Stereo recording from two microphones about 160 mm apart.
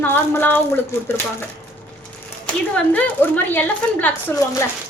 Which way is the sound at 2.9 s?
10° left (ahead or behind).